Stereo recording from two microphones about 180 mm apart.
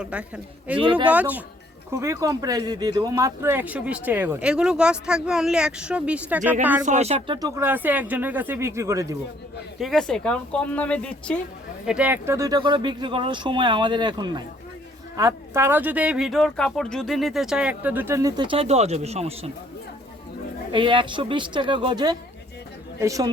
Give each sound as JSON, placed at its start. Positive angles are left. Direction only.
{"t": 0.0, "sound": "speech", "side_deg": -5}
{"t": 6.8, "sound": "speech", "side_deg": -40}
{"t": 7.3, "sound": "speech", "side_deg": -20}
{"t": 9.7, "sound": "a woman's voice", "side_deg": 0}
{"t": 11.9, "sound": "speech", "side_deg": -5}
{"t": 20.7, "sound": "speech", "side_deg": -25}